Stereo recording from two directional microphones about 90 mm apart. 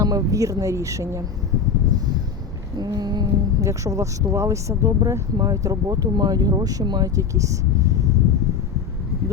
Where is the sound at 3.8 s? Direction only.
35° right (ahead or behind).